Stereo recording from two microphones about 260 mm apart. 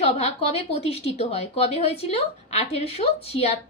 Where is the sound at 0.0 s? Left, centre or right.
Left.